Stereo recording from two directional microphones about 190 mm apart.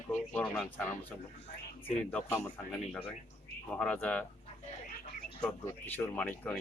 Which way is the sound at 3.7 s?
5° left (ahead or behind).